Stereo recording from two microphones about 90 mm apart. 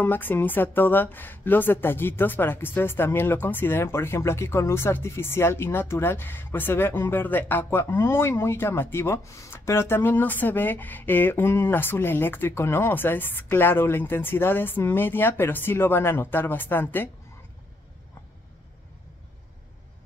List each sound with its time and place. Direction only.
0.0 s speech: 20° left (ahead or behind)